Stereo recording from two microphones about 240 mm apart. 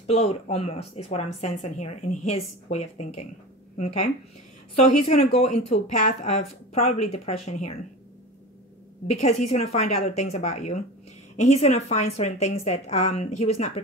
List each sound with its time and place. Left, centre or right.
0.0 s speech: left
4.7 s speech: left
5.1 s speech: left
9.5 s speech: left